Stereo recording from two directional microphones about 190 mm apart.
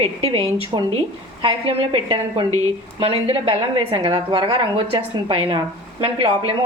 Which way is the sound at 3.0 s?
30° right (ahead or behind).